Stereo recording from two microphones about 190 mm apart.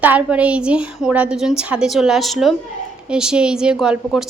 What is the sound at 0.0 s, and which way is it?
A woman's voice, 10° right (ahead or behind).